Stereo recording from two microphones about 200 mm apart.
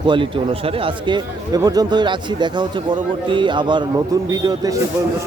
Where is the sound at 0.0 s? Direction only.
25° right (ahead or behind).